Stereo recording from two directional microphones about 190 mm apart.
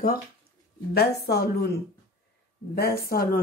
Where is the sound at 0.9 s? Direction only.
55° left (ahead or behind).